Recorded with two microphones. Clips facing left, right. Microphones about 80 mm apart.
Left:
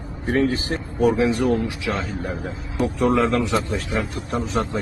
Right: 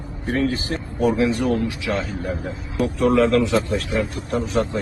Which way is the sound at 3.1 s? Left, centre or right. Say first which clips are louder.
Right 4 dB; centre.